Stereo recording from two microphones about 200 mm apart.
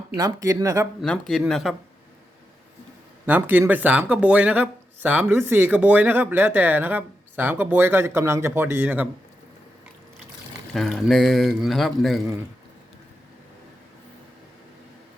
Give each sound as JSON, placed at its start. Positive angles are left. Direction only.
{"t": 0.2, "sound": "speech", "side_deg": -15}
{"t": 1.0, "sound": "speech", "side_deg": 0}
{"t": 3.2, "sound": "speech", "side_deg": -10}
{"t": 10.8, "sound": "speech", "side_deg": 0}